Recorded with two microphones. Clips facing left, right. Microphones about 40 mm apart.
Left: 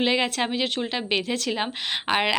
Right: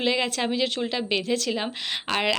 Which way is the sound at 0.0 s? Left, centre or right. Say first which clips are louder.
Left 1 dB; left.